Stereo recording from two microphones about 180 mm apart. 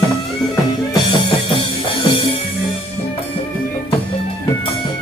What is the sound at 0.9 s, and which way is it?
Music, 25° left (ahead or behind).